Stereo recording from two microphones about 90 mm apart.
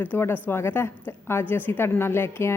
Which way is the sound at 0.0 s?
25° left (ahead or behind).